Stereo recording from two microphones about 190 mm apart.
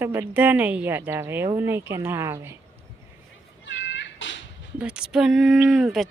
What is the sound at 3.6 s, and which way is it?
Cat, 70° left (ahead or behind).